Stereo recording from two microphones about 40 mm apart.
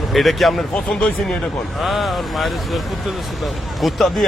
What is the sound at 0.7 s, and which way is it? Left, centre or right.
Speech, left.